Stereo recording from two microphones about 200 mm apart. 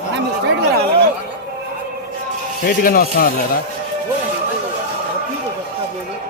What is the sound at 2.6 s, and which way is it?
Speech, 45° left (ahead or behind).